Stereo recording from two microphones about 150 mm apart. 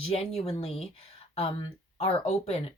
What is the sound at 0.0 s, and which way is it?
Speech, 40° left (ahead or behind).